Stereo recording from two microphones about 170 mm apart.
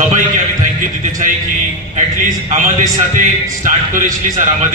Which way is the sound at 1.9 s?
45° right (ahead or behind).